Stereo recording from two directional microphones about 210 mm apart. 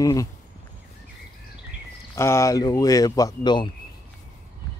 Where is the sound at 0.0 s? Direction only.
15° left (ahead or behind).